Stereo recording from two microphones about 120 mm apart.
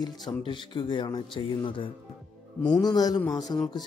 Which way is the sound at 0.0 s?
35° left (ahead or behind).